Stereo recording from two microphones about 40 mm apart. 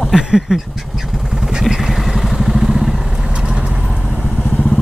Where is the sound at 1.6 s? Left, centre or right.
Centre.